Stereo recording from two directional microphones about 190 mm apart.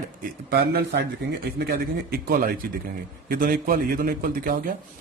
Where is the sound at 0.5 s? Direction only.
60° right (ahead or behind).